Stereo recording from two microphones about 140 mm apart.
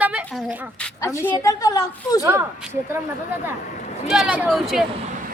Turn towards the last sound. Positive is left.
turn(degrees=0)  # may be behind; listen again after turning